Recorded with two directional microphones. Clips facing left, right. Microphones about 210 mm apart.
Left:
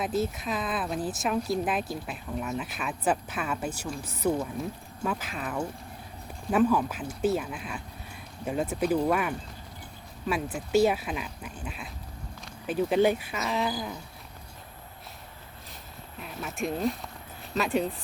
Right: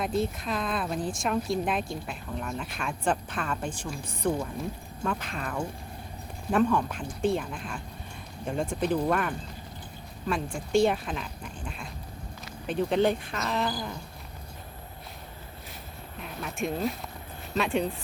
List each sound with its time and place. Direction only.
0.0 s speech: 5° left (ahead or behind)
16.2 s speech: centre (ahead or behind)